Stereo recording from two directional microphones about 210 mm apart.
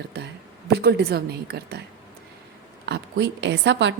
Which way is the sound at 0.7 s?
50° right (ahead or behind).